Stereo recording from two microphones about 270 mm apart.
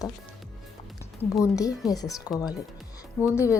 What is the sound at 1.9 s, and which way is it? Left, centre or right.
Speech, centre.